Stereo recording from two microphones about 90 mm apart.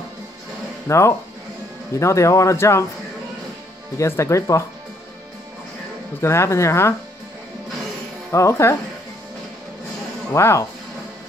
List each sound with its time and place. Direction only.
0.8 s speech: 35° left (ahead or behind)
4.0 s speech: 35° left (ahead or behind)
6.2 s speech: 30° left (ahead or behind)
8.3 s speech: 35° left (ahead or behind)
10.3 s speech: 30° left (ahead or behind)